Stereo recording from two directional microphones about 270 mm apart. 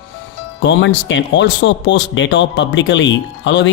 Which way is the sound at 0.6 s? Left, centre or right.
Left.